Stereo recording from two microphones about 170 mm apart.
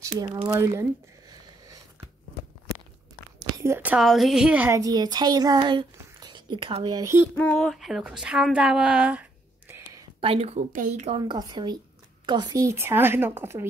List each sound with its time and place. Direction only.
0.0 s a woman's voice: 25° right (ahead or behind)
0.6 s speech: 15° right (ahead or behind)
3.5 s a woman's voice: 15° right (ahead or behind)
7.3 s a woman's voice: 5° left (ahead or behind); by 10.0 s 15° right (ahead or behind)
10.2 s a woman's voice: 35° right (ahead or behind)
11.1 s a woman's voice: 25° right (ahead or behind)